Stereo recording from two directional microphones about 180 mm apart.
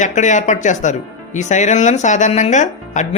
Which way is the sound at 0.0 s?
45° left (ahead or behind).